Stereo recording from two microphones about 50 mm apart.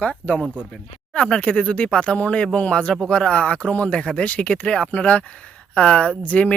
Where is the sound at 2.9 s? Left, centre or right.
Centre; by 6.5 s left.